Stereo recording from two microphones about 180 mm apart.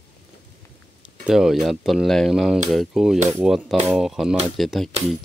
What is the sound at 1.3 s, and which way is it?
Speech, centre (ahead or behind).